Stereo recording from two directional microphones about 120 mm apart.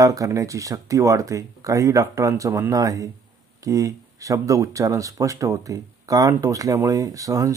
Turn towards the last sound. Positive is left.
turn(degrees=-30)  # may be behind; listen again after turning